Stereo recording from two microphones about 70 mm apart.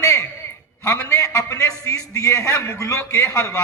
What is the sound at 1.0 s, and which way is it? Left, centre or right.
A man's voice, left.